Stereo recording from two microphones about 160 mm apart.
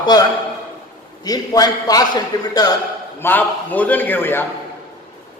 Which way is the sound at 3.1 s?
10° left (ahead or behind).